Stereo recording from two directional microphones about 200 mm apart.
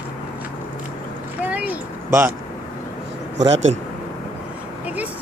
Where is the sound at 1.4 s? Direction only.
5° right (ahead or behind).